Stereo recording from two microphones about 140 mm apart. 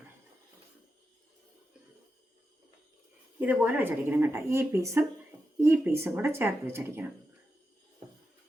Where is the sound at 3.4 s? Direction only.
15° right (ahead or behind).